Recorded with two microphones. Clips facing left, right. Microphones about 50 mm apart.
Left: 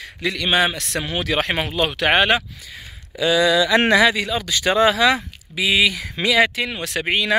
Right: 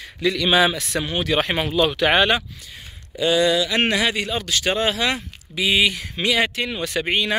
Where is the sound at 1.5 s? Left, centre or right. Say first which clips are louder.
Right 2 dB; left.